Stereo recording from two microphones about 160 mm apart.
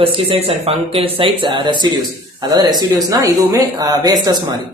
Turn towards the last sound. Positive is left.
turn(degrees=-25)  # may be behind; listen again after turning